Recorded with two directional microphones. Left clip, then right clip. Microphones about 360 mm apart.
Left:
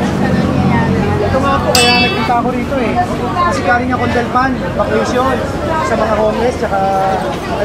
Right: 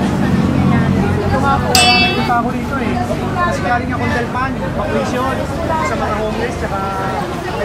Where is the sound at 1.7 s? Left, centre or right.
Centre.